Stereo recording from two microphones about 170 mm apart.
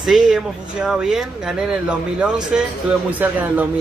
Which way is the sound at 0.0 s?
Centre (ahead or behind).